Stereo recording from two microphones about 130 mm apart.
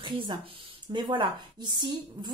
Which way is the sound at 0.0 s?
40° right (ahead or behind).